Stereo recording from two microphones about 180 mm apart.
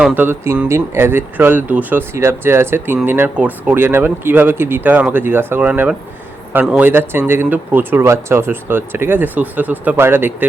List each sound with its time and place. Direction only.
0.0 s speech: 10° right (ahead or behind)